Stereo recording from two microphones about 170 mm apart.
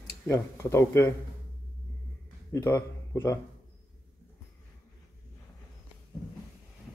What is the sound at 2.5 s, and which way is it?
Speech, 15° left (ahead or behind).